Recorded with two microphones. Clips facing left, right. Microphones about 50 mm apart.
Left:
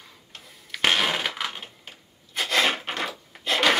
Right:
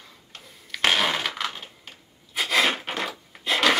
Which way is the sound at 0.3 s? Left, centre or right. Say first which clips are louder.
Right 1 dB; centre.